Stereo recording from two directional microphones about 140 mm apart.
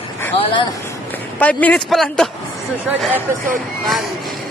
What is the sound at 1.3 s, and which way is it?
Speech, 10° left (ahead or behind).